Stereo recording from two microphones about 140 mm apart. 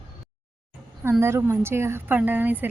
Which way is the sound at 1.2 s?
20° right (ahead or behind).